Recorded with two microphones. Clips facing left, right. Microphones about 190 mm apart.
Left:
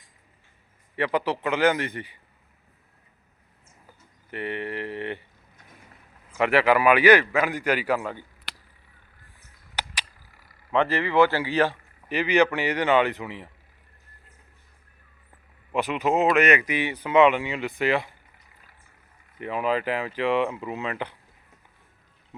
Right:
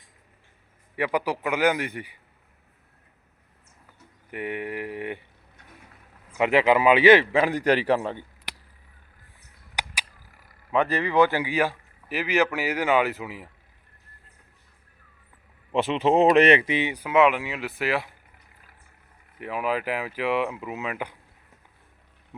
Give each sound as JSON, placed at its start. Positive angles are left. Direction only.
{"t": 0.9, "sound": "speech", "side_deg": -10}
{"t": 4.3, "sound": "speech", "side_deg": -15}
{"t": 6.3, "sound": "a man's voice", "side_deg": -15}
{"t": 9.7, "sound": "a sound", "side_deg": -10}
{"t": 10.7, "sound": "speech", "side_deg": -15}
{"t": 15.7, "sound": "a man's voice", "side_deg": -25}
{"t": 16.9, "sound": "speech", "side_deg": -10}
{"t": 19.4, "sound": "speech", "side_deg": -5}